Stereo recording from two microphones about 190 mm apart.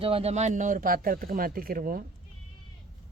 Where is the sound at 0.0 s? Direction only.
30° right (ahead or behind); by 2.0 s 50° right (ahead or behind).